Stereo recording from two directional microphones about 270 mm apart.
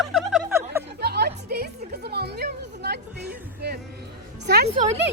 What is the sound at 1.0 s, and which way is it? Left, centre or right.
Music, right.